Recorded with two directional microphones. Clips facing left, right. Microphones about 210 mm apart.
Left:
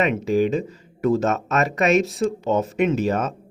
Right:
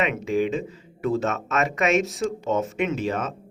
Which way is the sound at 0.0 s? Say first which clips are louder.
Left 4 dB; 35° left (ahead or behind).